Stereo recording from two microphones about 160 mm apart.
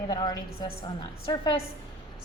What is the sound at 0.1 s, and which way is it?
A woman's voice, 25° left (ahead or behind).